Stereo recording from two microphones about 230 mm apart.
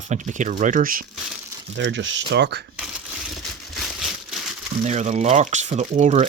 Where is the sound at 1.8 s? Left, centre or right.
Right.